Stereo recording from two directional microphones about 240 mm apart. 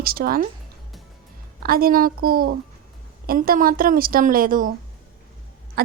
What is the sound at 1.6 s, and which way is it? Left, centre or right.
A woman's voice, right.